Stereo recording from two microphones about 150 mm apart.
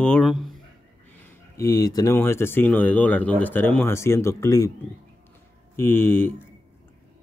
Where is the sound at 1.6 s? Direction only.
20° left (ahead or behind).